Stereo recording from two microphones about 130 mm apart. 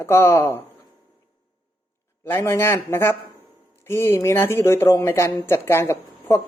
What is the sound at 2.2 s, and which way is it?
Speech, 20° left (ahead or behind).